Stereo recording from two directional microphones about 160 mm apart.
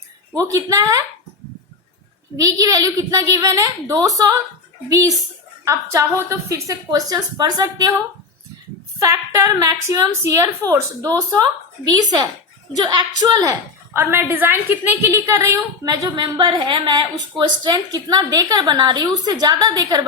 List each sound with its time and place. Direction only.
0.3 s a woman's voice: 20° right (ahead or behind)
2.3 s a woman's voice: 20° right (ahead or behind)
5.6 s a woman's voice: 15° right (ahead or behind)
9.0 s a woman's voice: 20° right (ahead or behind)
12.8 s a woman's voice: 25° right (ahead or behind)